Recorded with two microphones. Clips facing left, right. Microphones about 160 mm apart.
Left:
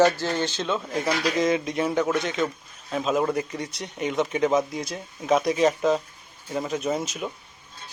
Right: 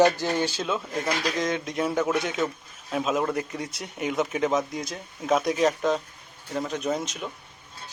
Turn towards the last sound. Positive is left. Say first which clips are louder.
# left 1 dB
turn(degrees=5)  # may be behind; listen again after turning